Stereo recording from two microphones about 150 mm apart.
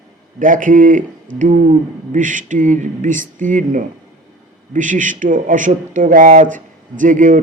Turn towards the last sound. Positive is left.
turn(degrees=-60)  # may be behind; listen again after turning